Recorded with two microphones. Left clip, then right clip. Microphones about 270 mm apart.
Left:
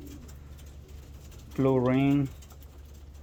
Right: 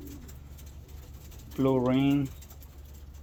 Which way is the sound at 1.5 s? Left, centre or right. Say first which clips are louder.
Left 1 dB; centre.